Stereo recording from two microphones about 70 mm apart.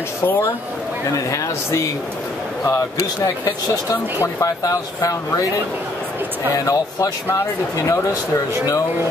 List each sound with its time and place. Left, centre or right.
0.2 s speech: left
1.1 s speech: left
3.9 s speech: left
6.6 s speech: left